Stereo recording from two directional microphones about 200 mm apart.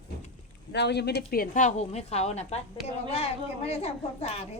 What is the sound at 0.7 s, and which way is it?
A woman's voice, 60° left (ahead or behind).